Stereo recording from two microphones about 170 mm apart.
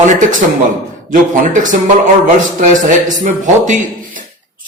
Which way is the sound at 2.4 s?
50° right (ahead or behind).